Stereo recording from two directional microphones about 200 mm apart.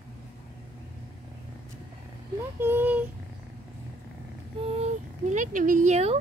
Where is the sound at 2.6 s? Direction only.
10° right (ahead or behind).